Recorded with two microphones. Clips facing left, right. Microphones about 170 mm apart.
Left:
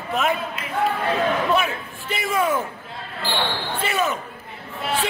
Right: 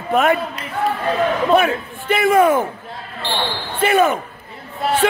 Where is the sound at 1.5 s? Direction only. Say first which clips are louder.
Right 7 dB; 55° right (ahead or behind).